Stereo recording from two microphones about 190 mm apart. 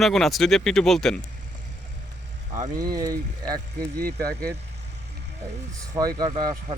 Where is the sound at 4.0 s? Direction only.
60° right (ahead or behind).